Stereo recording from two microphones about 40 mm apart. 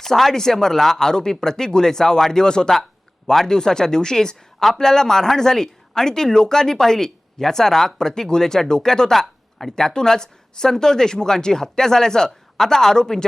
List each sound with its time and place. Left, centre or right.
0.0 s speech: centre
9.7 s speech: centre